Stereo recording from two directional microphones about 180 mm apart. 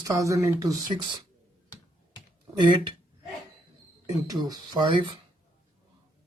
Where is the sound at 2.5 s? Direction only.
25° right (ahead or behind).